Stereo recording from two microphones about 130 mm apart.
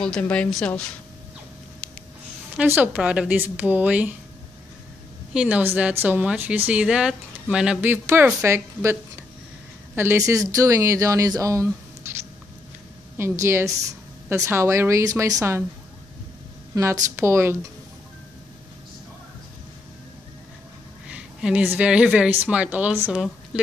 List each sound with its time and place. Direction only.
0.0 s a woman's voice: 10° left (ahead or behind)
2.5 s speech: 15° right (ahead or behind)
5.3 s a woman's voice: 10° right (ahead or behind)
13.2 s a woman's voice: 20° right (ahead or behind)
16.7 s a woman's voice: 30° right (ahead or behind)
21.1 s a woman's voice: 10° right (ahead or behind)